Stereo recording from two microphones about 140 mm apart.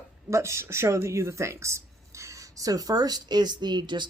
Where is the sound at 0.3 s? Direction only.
20° right (ahead or behind).